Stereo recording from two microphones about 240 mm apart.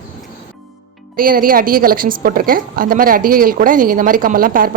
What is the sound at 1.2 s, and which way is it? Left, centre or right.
A woman's voice, right.